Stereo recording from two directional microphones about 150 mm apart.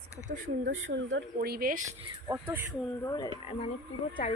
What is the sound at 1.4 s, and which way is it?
Speech, 85° right.